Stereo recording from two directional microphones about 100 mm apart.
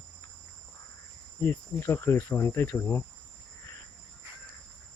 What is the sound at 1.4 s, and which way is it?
Cricket, 25° left (ahead or behind).